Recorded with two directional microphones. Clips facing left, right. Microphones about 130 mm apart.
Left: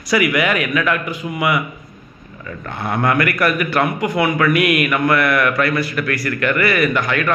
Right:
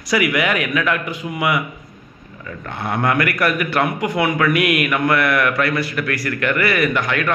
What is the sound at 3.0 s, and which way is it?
Speech, 15° right (ahead or behind).